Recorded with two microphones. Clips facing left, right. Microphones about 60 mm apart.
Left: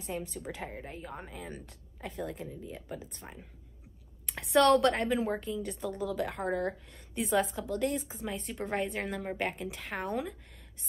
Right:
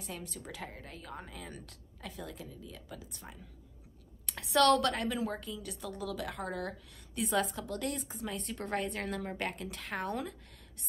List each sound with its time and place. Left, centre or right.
0.0 s a woman's voice: left
4.3 s a woman's voice: left